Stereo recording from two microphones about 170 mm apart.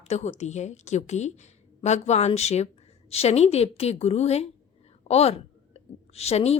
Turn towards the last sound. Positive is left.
turn(degrees=40)  # may be behind; listen again after turning